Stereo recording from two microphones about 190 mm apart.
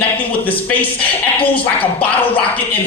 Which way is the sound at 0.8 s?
5° left (ahead or behind).